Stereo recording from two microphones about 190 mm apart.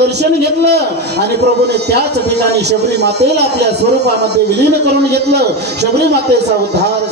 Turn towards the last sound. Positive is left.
turn(degrees=-60)  # may be behind; listen again after turning